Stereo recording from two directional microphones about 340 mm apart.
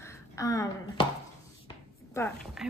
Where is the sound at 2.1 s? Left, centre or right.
Centre.